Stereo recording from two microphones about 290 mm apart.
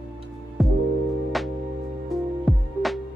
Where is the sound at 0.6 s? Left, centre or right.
Centre.